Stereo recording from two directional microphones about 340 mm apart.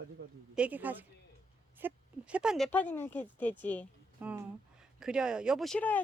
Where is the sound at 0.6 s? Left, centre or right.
Centre.